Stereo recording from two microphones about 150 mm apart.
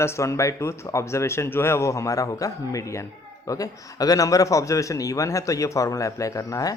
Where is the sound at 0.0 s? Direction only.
20° left (ahead or behind).